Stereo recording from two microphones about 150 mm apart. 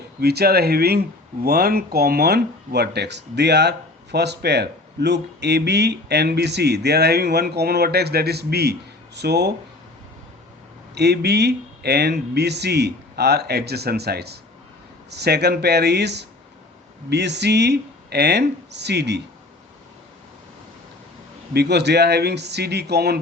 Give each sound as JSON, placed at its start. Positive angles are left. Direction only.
{"t": 0.2, "sound": "speech", "side_deg": -90}
{"t": 4.1, "sound": "speech", "side_deg": -90}
{"t": 10.9, "sound": "speech", "side_deg": -90}
{"t": 17.7, "sound": "speech", "side_deg": -90}
{"t": 21.5, "sound": "speech", "side_deg": -90}